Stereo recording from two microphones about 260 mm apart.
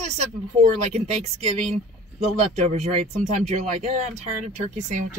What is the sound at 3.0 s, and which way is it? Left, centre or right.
Speech, right.